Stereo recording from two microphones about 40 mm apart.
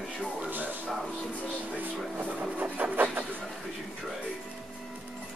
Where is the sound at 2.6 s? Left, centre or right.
Right.